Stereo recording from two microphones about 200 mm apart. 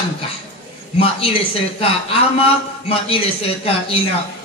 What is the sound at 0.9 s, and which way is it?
Speech, 30° left (ahead or behind).